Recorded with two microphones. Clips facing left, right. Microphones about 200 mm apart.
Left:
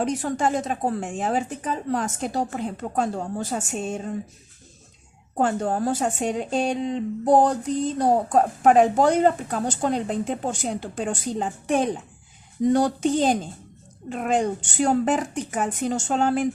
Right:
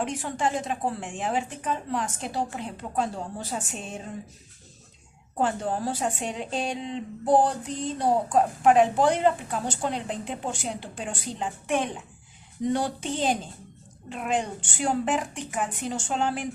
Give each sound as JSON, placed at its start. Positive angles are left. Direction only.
{"t": 0.0, "sound": "speech", "side_deg": 40}
{"t": 5.4, "sound": "speech", "side_deg": 45}